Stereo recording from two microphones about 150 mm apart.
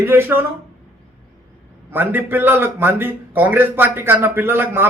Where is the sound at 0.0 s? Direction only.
15° right (ahead or behind).